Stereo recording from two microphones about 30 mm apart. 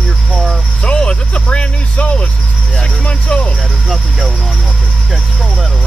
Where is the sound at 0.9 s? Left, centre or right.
Left.